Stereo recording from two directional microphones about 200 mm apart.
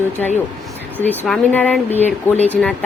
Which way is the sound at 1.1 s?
5° left (ahead or behind).